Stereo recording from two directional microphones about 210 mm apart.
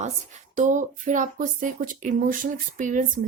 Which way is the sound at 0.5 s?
35° right (ahead or behind).